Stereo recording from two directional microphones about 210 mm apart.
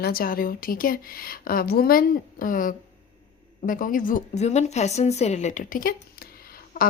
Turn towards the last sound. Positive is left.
turn(degrees=40)  # may be behind; listen again after turning